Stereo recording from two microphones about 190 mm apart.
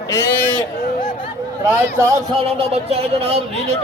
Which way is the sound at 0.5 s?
25° left (ahead or behind).